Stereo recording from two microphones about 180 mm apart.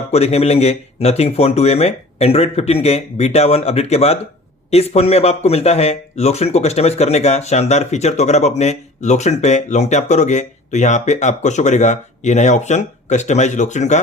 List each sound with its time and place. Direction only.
0.1 s a man's voice: 35° left (ahead or behind)